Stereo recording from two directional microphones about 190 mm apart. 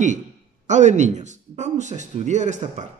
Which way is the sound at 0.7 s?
40° right (ahead or behind).